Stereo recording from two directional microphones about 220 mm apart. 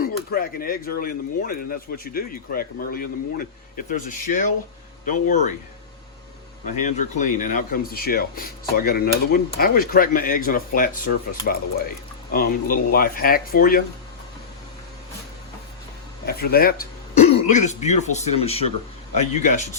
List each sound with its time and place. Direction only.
0.0 s speech: 40° left (ahead or behind)
6.7 s speech: 35° left (ahead or behind)
16.2 s speech: 45° left (ahead or behind)